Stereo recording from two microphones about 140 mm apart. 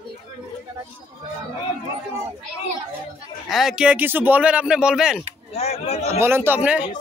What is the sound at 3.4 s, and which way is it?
Speech, centre (ahead or behind).